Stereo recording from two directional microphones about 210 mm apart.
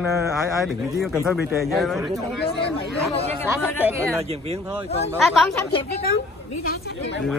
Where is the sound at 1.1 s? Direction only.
Centre (ahead or behind).